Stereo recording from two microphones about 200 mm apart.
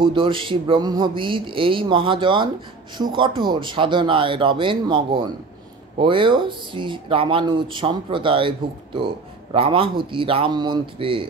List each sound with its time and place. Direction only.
0.0 s speech: 25° right (ahead or behind)